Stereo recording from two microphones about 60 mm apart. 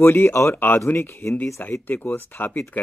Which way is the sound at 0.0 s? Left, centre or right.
Left.